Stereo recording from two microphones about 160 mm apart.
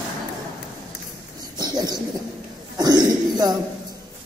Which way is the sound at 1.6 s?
25° right (ahead or behind).